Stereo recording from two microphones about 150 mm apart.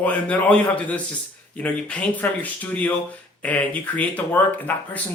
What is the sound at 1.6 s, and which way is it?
Speech, 10° left (ahead or behind).